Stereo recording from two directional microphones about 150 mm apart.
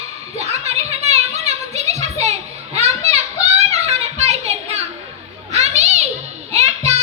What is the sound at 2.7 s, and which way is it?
Children playing, 45° right (ahead or behind).